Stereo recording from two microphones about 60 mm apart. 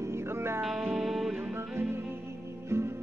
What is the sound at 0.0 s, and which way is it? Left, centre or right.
Music, right.